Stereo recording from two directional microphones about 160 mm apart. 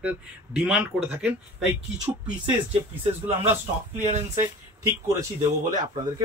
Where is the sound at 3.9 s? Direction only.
45° right (ahead or behind).